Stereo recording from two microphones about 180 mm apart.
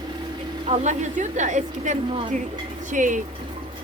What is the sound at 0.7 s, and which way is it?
A woman's voice, 40° right (ahead or behind).